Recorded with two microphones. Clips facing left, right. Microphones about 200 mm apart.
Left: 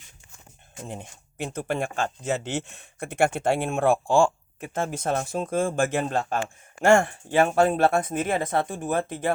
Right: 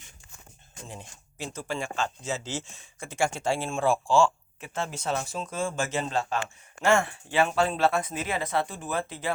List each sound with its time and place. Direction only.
0.9 s speech: 60° left (ahead or behind)